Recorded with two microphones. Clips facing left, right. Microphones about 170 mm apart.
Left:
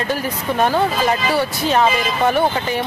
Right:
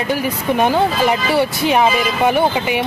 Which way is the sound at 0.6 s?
15° right (ahead or behind).